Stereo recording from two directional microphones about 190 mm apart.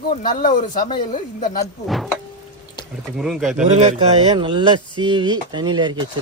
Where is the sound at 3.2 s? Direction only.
Centre (ahead or behind).